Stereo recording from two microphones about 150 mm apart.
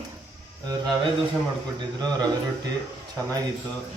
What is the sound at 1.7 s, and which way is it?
Speech, 25° right (ahead or behind).